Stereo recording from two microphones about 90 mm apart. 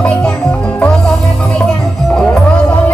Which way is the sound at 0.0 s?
10° left (ahead or behind).